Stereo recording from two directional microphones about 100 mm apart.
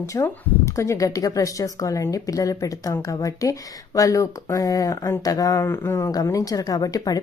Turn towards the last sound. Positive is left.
turn(degrees=40)  # may be behind; listen again after turning